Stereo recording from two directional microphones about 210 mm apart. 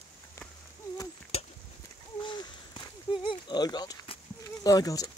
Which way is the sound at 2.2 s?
20° left (ahead or behind).